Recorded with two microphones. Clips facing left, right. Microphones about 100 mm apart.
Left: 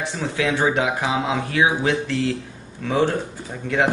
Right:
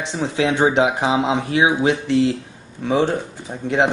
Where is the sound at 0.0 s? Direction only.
20° right (ahead or behind).